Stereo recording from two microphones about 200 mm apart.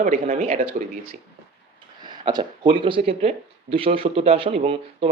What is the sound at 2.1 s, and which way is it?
Speech, 25° right (ahead or behind).